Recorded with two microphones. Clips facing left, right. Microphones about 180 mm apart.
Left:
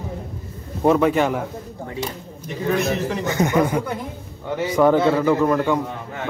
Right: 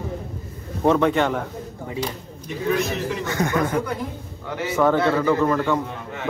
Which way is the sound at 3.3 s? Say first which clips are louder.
Left 3 dB; 20° left (ahead or behind).